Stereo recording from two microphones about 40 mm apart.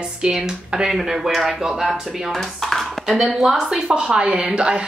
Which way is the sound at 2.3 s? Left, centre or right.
Centre.